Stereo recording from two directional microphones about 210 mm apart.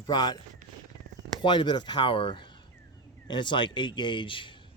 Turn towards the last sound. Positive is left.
turn(degrees=25)  # may be behind; listen again after turning